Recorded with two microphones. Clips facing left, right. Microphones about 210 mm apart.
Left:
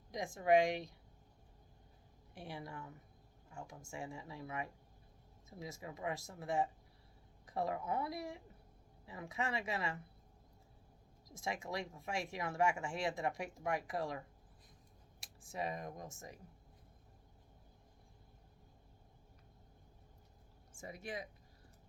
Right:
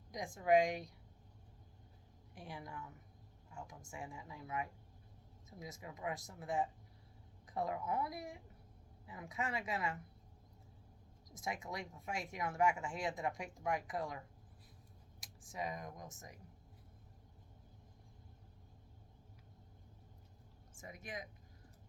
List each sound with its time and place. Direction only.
0.1 s speech: 25° left (ahead or behind)
2.4 s speech: 25° left (ahead or behind)
11.3 s speech: 25° left (ahead or behind)
15.2 s speech: 25° left (ahead or behind)
20.8 s speech: 30° left (ahead or behind)